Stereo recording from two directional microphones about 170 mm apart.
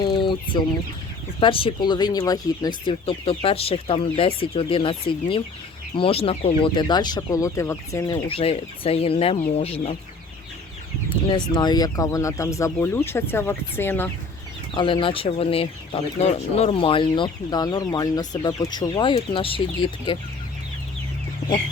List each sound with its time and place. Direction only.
0.0 s chicken: 30° left (ahead or behind)
1.4 s speech: 30° left (ahead or behind)
11.3 s speech: 25° left (ahead or behind)
14.7 s speech: 30° left (ahead or behind)